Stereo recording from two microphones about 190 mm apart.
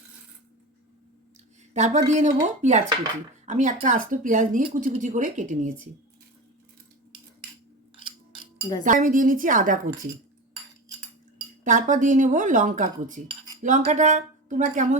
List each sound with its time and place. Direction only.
1.7 s speech: 40° right (ahead or behind)
8.8 s speech: 45° right (ahead or behind)
11.6 s speech: 40° right (ahead or behind)